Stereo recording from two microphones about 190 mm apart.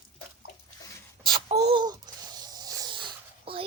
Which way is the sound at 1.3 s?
30° right (ahead or behind).